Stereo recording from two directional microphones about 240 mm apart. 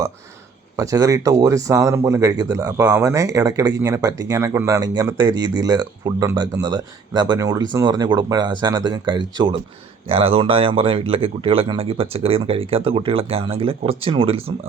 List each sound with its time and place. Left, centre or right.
0.8 s a man's voice: centre